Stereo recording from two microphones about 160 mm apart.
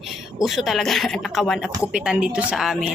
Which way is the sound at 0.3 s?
Centre (ahead or behind).